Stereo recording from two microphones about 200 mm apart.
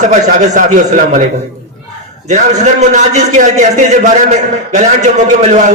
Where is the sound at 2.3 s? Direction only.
35° right (ahead or behind).